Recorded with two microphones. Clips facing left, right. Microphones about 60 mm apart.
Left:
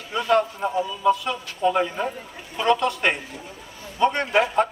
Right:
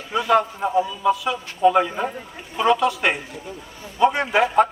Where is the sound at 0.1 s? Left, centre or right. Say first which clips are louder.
Right 2 dB; centre.